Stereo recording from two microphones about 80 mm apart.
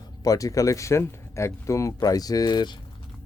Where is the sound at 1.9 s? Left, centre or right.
Left.